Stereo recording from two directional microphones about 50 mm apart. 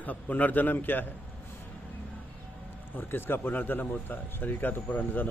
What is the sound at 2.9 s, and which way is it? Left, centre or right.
Speech, left.